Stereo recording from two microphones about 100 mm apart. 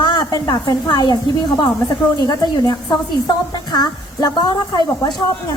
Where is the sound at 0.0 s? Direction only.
45° left (ahead or behind).